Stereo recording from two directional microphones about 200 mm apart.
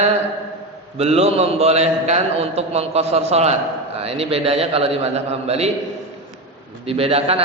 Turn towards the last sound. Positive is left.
turn(degrees=-30)  # may be behind; listen again after turning